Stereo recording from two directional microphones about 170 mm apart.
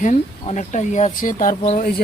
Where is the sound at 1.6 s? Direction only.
40° left (ahead or behind).